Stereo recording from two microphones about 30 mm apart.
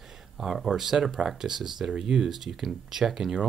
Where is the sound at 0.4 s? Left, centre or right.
Centre; by 2.2 s right.